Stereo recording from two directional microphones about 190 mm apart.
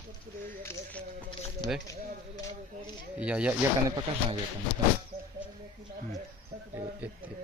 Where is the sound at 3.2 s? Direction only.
5° right (ahead or behind).